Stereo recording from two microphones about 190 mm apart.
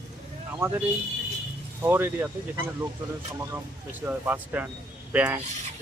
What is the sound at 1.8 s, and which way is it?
Speech, 10° right (ahead or behind).